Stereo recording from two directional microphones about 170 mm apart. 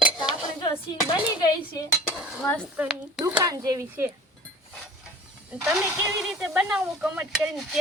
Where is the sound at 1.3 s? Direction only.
25° left (ahead or behind).